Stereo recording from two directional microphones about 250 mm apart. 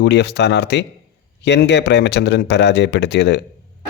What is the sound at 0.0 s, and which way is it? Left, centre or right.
Speech, left.